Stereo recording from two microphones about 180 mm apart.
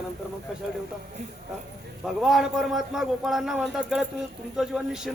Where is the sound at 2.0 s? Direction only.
Centre (ahead or behind).